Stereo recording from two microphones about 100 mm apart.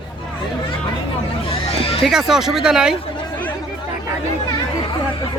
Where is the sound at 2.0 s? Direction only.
Centre (ahead or behind).